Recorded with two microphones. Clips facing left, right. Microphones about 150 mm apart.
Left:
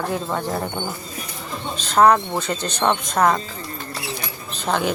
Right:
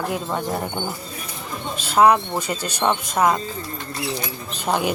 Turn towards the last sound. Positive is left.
turn(degrees=-10)  # may be behind; listen again after turning